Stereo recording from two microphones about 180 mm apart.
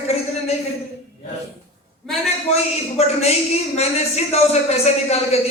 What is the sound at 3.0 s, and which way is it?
Speech, 35° left (ahead or behind).